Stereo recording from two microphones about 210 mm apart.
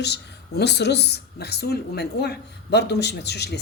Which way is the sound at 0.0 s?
55° left (ahead or behind).